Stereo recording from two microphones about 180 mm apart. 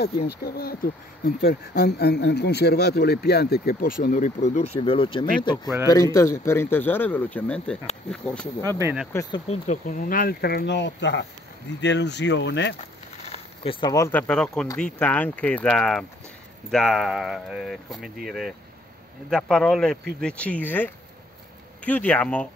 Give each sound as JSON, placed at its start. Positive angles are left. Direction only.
{"t": 0.0, "sound": "speech", "side_deg": 60}
{"t": 4.7, "sound": "speech", "side_deg": 30}
{"t": 5.9, "sound": "speech", "side_deg": 20}
{"t": 8.6, "sound": "speech", "side_deg": -15}
{"t": 9.1, "sound": "speech", "side_deg": 20}
{"t": 9.5, "sound": "speech", "side_deg": 45}
{"t": 11.8, "sound": "speech", "side_deg": 75}
{"t": 13.2, "sound": "speech", "side_deg": 35}